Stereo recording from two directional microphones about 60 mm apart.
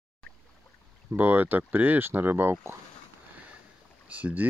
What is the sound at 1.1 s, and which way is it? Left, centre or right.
Speech, right.